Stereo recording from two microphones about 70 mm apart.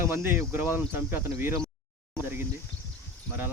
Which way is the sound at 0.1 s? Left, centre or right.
Right.